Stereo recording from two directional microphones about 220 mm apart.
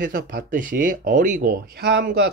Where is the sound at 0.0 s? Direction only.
40° right (ahead or behind).